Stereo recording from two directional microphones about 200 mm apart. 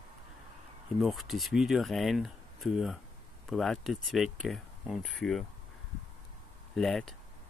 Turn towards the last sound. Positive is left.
turn(degrees=0)  # may be behind; listen again after turning